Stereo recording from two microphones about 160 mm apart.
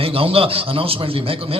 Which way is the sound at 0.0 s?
35° right (ahead or behind).